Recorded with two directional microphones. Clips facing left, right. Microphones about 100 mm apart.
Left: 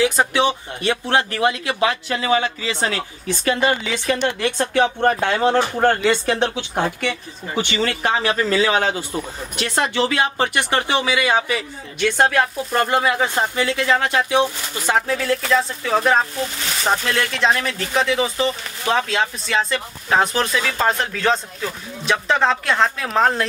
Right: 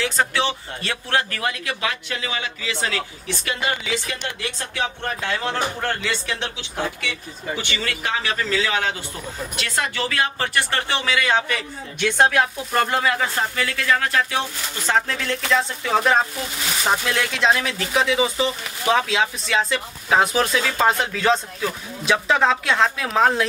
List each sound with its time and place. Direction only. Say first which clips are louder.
0.0 s speech: left 5 dB; 15° left (ahead or behind); by 7.2 s 50° left (ahead or behind)
7.5 s speech: left 8 dB; 30° left (ahead or behind)
9.6 s speech: left 6 dB; 25° left (ahead or behind); by 23.4 s centre (ahead or behind)